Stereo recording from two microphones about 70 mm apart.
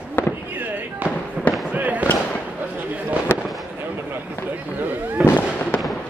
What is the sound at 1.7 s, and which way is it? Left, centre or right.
Fireworks, right.